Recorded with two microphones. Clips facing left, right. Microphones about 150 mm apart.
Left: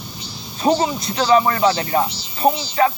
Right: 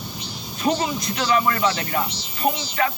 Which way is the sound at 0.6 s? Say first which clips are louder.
Left 5 dB; 30° left (ahead or behind).